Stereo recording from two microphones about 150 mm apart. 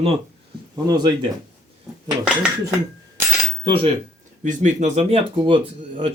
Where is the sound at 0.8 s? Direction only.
30° right (ahead or behind).